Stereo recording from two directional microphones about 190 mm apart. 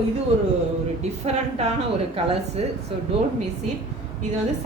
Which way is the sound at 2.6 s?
30° right (ahead or behind).